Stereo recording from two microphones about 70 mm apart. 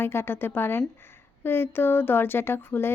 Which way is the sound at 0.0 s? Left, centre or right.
Left.